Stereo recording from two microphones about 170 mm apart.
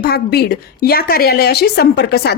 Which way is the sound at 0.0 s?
65° left (ahead or behind).